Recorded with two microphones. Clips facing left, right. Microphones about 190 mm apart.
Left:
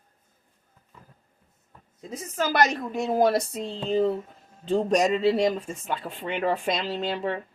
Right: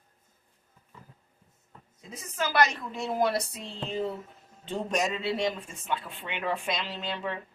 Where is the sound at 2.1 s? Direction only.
40° left (ahead or behind).